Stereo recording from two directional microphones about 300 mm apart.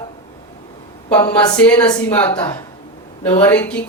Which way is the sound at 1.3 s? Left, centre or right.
Centre.